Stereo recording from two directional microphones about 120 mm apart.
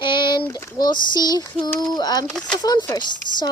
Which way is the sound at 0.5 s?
35° left (ahead or behind).